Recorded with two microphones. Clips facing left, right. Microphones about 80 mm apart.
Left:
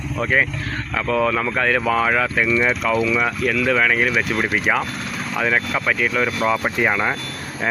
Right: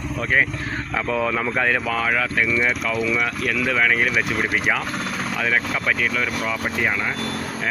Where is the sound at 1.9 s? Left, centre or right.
Centre.